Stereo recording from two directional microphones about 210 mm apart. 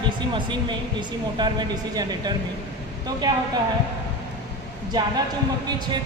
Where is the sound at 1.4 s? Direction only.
20° right (ahead or behind).